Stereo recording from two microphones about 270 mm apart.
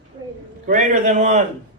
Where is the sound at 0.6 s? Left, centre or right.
Right.